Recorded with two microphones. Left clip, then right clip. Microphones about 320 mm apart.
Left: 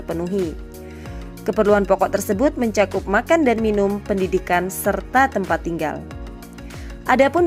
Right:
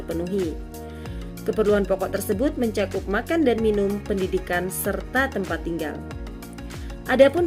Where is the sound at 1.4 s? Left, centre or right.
Centre.